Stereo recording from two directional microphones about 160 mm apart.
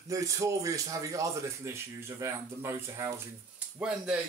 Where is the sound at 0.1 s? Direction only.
20° right (ahead or behind).